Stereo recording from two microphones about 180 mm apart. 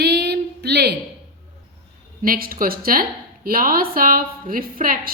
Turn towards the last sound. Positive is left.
turn(degrees=-50)  # may be behind; listen again after turning